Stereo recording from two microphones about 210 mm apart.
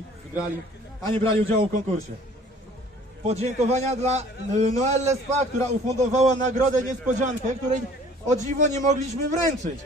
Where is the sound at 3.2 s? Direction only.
30° right (ahead or behind).